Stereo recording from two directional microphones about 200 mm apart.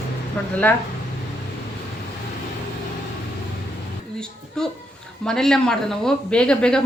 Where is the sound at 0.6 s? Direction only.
10° left (ahead or behind).